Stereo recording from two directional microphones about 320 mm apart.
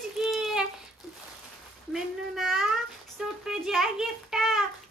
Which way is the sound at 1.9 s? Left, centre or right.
Centre.